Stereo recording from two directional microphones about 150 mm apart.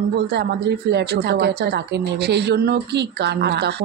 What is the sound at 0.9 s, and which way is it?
A woman's voice, 90° right.